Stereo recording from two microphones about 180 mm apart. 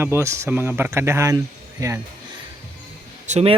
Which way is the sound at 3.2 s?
40° right (ahead or behind).